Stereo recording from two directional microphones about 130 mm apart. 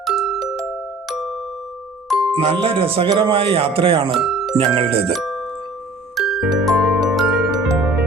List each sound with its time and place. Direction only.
0.0 s glockenspiel: centre (ahead or behind)
2.0 s music: 5° right (ahead or behind)
2.3 s speech: 45° right (ahead or behind)
4.1 s speech: centre (ahead or behind)
4.5 s speech: 40° right (ahead or behind)
5.1 s music: centre (ahead or behind)
6.1 s glockenspiel: centre (ahead or behind)